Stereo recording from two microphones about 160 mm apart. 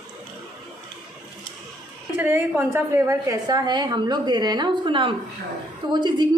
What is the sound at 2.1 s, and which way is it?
A woman's voice, 10° right (ahead or behind).